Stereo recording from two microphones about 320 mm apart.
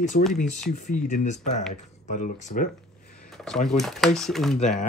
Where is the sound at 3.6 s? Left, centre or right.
Centre.